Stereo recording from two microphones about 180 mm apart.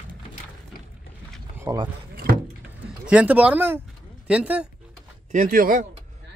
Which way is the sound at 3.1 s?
10° right (ahead or behind).